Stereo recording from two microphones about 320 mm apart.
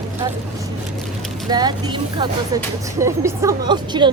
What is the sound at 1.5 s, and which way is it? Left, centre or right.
A woman's voice, centre.